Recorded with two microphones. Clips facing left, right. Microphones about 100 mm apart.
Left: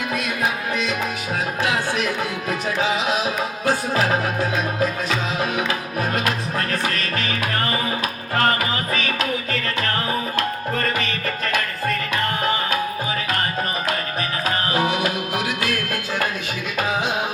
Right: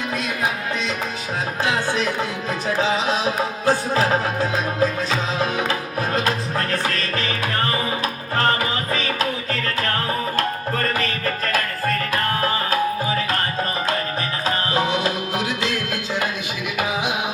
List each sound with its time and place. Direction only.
1.6 s speech: 30° right (ahead or behind)
2.5 s music: 30° right (ahead or behind)
12.7 s tabla: 35° right (ahead or behind)
14.4 s music: 30° right (ahead or behind)